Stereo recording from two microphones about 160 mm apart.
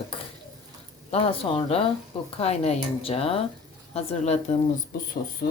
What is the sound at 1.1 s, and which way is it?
A woman's voice, 35° left (ahead or behind).